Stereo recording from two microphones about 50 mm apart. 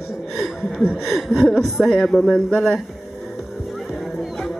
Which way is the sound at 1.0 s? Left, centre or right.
Centre.